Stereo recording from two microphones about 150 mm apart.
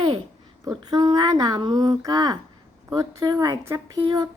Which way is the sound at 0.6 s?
25° right (ahead or behind).